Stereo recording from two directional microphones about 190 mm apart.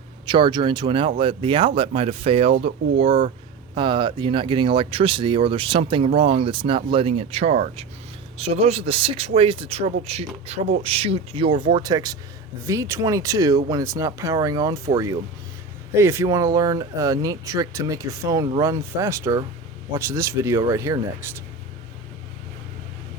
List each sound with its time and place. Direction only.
0.3 s speech: 25° right (ahead or behind)